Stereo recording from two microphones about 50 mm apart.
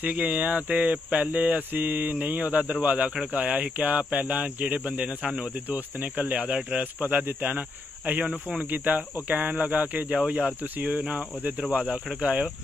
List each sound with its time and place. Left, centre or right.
0.0 s speech: right
5.2 s speech: centre
5.7 s speech: right
6.8 s speech: right
12.2 s speech: right